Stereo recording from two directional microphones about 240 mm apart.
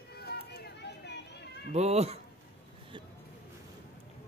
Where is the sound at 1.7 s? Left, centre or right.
Right.